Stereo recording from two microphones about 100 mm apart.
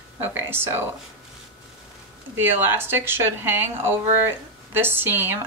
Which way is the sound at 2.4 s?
20° right (ahead or behind).